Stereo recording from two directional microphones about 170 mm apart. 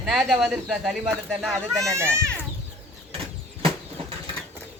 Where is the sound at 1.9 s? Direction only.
15° right (ahead or behind).